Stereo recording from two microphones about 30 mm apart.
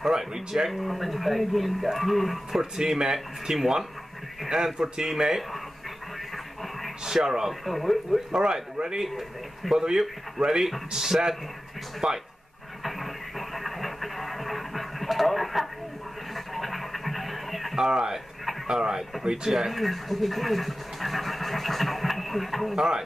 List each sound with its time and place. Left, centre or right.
0.0 s speech: centre
0.7 s speech: centre
2.8 s a man's voice: centre
4.7 s speech: right
6.3 s a sound: centre
7.1 s speech: centre
7.6 s speech: centre
8.4 s speech: centre
9.7 s speech: centre
12.0 s speech: right
12.8 s a sound: centre
17.7 s speech: centre
19.5 s speech: centre
22.8 s speech: right